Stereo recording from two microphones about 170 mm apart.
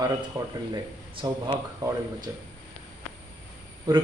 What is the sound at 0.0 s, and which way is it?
Speech, 20° right (ahead or behind).